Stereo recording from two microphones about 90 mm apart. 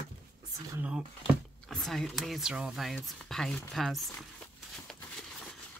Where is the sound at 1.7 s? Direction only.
5° left (ahead or behind).